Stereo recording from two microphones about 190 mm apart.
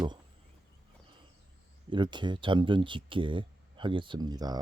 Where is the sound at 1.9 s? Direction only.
25° right (ahead or behind).